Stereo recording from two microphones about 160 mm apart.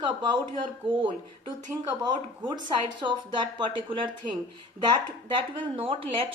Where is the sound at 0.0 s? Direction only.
30° right (ahead or behind).